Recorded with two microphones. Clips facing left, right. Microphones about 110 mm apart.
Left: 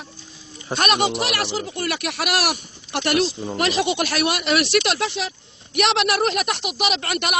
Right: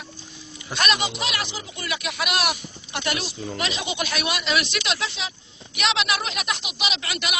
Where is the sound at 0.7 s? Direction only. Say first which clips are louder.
Left 5 dB; 55° left (ahead or behind).